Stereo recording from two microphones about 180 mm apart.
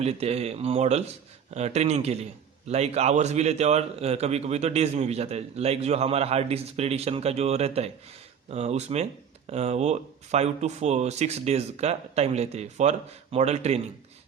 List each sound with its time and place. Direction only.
0.0 s a man's voice: 35° right (ahead or behind)